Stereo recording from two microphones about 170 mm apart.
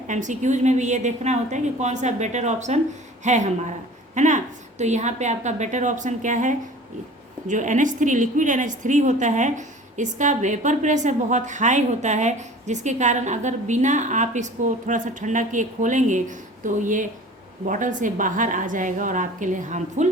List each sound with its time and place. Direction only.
0.1 s a woman's voice: 45° right (ahead or behind)